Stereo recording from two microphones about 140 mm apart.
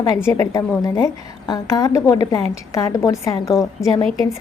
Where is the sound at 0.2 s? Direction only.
20° left (ahead or behind).